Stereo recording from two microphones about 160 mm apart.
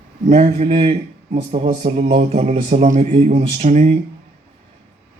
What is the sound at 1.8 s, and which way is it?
Speech, 45° right (ahead or behind).